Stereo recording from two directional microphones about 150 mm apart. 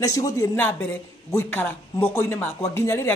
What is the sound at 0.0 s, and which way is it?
Speech, 25° left (ahead or behind).